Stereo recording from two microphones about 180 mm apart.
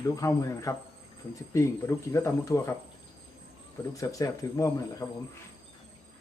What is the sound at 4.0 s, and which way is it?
Speech, 20° left (ahead or behind).